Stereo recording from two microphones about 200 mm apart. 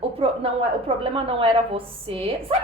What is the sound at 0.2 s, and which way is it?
A woman's voice, 25° right (ahead or behind).